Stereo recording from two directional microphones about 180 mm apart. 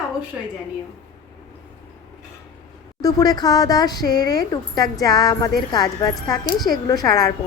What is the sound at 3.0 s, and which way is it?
A woman's voice, 20° left (ahead or behind).